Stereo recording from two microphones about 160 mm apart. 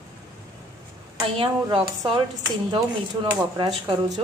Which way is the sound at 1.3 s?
35° right (ahead or behind).